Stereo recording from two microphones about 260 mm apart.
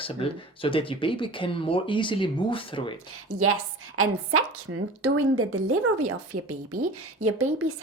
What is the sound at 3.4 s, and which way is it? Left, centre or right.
Speech, right.